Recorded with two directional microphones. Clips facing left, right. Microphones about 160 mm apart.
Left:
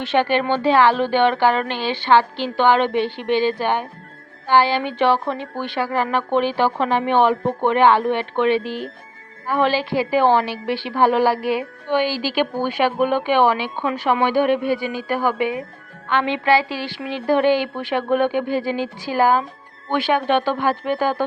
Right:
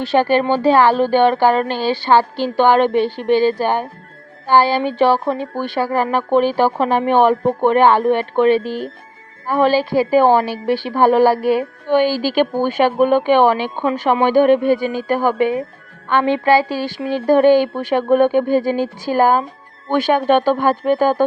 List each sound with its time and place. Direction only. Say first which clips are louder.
0.0 s a woman's voice: right 4 dB; 40° right (ahead or behind)